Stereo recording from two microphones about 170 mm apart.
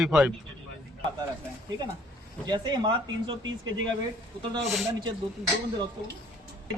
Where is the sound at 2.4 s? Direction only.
25° right (ahead or behind).